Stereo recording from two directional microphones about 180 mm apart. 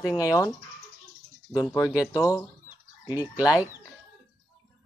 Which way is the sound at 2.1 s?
20° left (ahead or behind).